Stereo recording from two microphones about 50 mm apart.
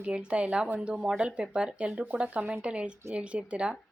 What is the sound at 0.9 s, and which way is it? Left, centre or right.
Speech, centre.